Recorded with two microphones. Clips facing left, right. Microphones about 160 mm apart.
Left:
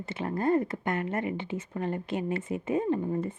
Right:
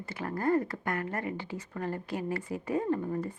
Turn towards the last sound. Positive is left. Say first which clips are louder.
# left 2 dB
turn(degrees=20)  # may be behind; listen again after turning